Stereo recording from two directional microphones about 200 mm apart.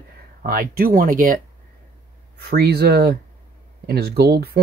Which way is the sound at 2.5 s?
50° right (ahead or behind).